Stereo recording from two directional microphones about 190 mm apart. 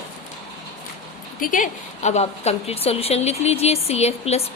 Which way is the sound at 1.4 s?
45° left (ahead or behind).